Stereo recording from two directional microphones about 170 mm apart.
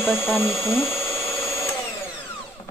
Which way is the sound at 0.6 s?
15° left (ahead or behind).